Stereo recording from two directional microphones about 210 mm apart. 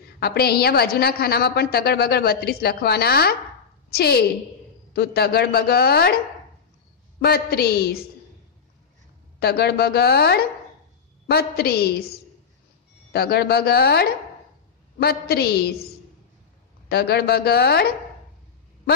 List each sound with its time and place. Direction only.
0.2 s a woman's voice: 50° left (ahead or behind)
7.2 s a woman's voice: 45° left (ahead or behind)
9.4 s a woman's voice: 50° left (ahead or behind)
16.9 s a woman's voice: 50° left (ahead or behind)